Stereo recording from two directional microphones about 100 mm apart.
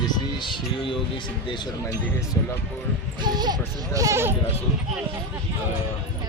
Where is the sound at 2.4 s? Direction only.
25° left (ahead or behind).